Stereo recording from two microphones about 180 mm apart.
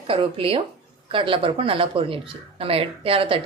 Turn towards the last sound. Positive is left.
turn(degrees=-30)  # may be behind; listen again after turning